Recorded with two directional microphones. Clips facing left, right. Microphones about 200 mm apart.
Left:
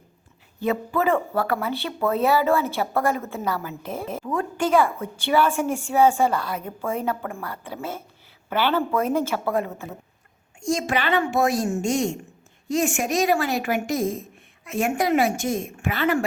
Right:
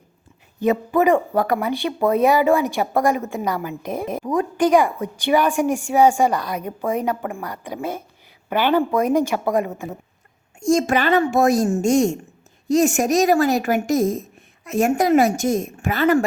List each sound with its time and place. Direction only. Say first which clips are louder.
0.6 s a woman's voice: right 5 dB; 15° right (ahead or behind)
10.6 s a woman's voice: right 6 dB; 45° right (ahead or behind)